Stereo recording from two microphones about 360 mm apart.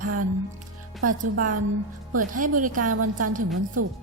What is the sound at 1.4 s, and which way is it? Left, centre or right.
Speech, right.